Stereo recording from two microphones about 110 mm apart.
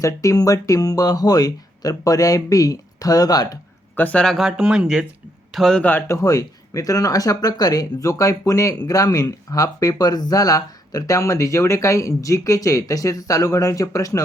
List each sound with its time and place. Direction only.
0.0 s speech: 30° left (ahead or behind)
3.9 s speech: 15° left (ahead or behind)
6.1 s speech: 30° left (ahead or behind)